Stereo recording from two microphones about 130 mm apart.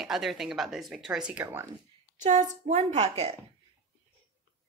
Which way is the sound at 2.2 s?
65° right (ahead or behind).